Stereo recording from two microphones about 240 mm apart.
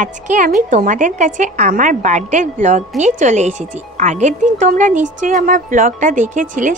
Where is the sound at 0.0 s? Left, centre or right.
Right.